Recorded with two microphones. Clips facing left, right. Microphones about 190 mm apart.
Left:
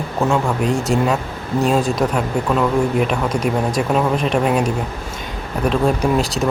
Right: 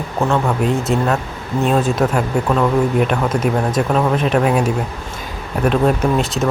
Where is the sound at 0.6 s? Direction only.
Centre (ahead or behind).